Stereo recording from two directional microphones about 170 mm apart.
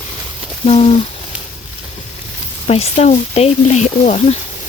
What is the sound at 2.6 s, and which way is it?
Speech, 35° left (ahead or behind).